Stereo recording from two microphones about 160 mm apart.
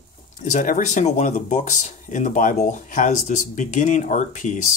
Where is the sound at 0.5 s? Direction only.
55° left (ahead or behind).